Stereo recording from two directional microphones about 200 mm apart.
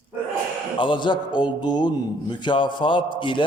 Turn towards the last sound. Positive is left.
turn(degrees=25)  # may be behind; listen again after turning